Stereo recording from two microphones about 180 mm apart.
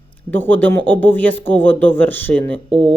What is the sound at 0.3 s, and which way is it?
A woman's voice, 10° left (ahead or behind).